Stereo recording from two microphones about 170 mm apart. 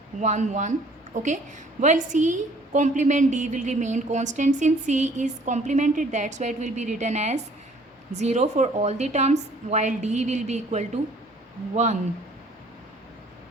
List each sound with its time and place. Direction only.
0.2 s a woman's voice: 45° right (ahead or behind)